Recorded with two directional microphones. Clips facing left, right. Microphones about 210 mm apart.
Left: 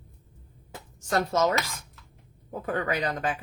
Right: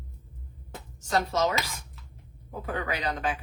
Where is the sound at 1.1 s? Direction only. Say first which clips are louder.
Left 2 dB; 50° left (ahead or behind).